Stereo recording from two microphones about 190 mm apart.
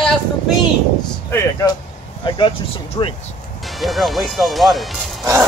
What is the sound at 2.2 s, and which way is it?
Speech, 25° left (ahead or behind).